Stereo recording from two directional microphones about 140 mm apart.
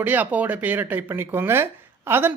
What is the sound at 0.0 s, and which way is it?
Speech, 10° right (ahead or behind).